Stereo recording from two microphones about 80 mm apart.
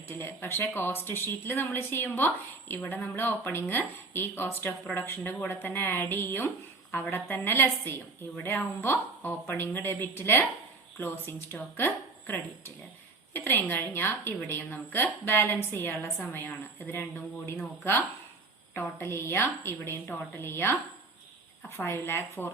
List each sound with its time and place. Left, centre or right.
0.1 s speech: left
13.3 s a woman's voice: left